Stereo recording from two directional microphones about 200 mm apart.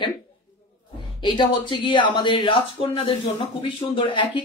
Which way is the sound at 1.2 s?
25° left (ahead or behind).